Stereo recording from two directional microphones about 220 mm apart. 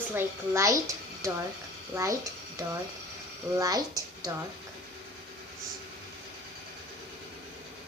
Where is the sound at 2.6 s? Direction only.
15° right (ahead or behind).